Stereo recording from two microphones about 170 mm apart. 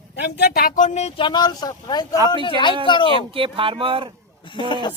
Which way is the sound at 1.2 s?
25° left (ahead or behind).